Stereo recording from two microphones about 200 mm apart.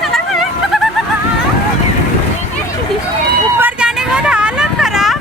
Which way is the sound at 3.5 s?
5° right (ahead or behind).